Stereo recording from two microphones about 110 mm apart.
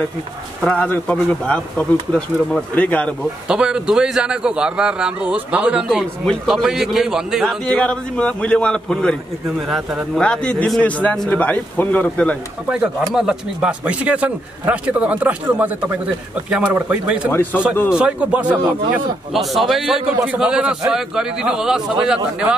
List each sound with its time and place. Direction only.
0.6 s speech: 10° left (ahead or behind)
3.4 s a man's voice: 5° right (ahead or behind); by 12.4 s 15° left (ahead or behind)
12.6 s speech: 10° right (ahead or behind)
17.3 s speech: 15° left (ahead or behind)
17.8 s speech: 10° right (ahead or behind)
19.3 s a man's voice: centre (ahead or behind)